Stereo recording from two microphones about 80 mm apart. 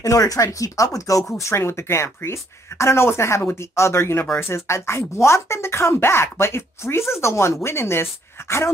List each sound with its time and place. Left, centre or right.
0.0 s speech: left